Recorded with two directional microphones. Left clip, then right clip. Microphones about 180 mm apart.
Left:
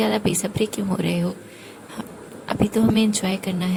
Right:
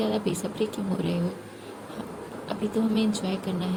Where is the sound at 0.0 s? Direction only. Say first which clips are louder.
Left 6 dB; 55° left (ahead or behind).